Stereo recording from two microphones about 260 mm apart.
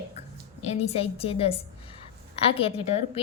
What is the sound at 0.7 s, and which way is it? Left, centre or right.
A woman's voice, left.